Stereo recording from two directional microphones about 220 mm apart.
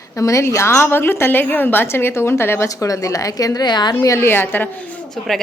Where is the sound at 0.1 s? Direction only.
15° left (ahead or behind).